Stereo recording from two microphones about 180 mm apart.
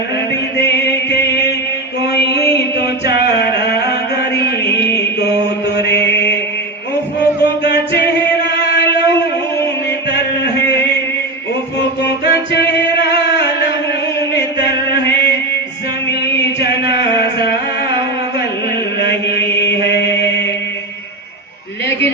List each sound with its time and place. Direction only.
2.8 s a sound: 65° left (ahead or behind)
5.7 s mantra: 70° left (ahead or behind)
7.6 s music: 60° left (ahead or behind)
8.7 s a sound: 65° left (ahead or behind)
11.8 s music: 70° left (ahead or behind)
13.0 s a sound: 70° left (ahead or behind)
16.3 s chant: 70° left (ahead or behind)
18.9 s mantra: 65° left (ahead or behind)
19.6 s chant: 70° left (ahead or behind)